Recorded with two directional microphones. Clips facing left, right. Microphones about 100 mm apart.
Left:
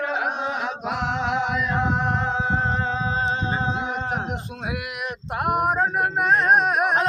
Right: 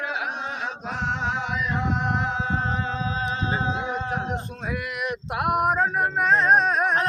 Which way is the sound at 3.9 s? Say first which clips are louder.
Even; 10° left (ahead or behind).